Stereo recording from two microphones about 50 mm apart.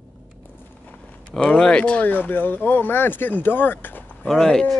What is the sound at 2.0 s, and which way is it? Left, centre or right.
Speech, left.